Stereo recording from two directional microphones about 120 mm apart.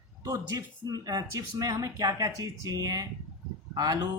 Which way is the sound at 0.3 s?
35° right (ahead or behind).